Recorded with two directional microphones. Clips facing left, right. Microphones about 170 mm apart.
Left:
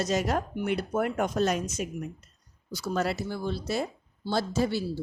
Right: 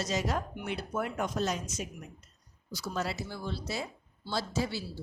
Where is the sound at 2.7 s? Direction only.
55° left (ahead or behind).